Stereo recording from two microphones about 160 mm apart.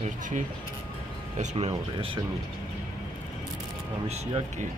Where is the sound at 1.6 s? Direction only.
35° right (ahead or behind).